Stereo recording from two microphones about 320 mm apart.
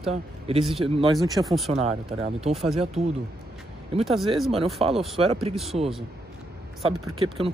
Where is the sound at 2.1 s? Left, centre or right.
Centre.